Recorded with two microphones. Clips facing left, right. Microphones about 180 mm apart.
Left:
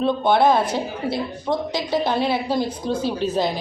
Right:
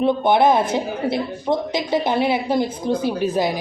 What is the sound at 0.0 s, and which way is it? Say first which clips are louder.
A woman's voice: right 1 dB; 20° right (ahead or behind).